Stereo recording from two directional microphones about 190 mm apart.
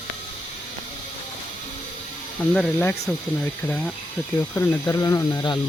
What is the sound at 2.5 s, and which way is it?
Speech, 5° left (ahead or behind).